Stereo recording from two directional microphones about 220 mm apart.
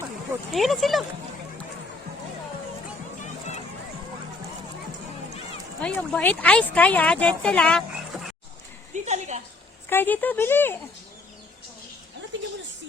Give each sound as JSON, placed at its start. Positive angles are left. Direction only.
{"t": 0.5, "sound": "speech", "side_deg": 0}
{"t": 5.8, "sound": "speech", "side_deg": 5}
{"t": 8.9, "sound": "a sound", "side_deg": -30}
{"t": 9.9, "sound": "speech", "side_deg": 10}